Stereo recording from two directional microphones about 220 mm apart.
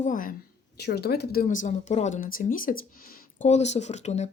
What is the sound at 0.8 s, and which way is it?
Speech, 45° left (ahead or behind).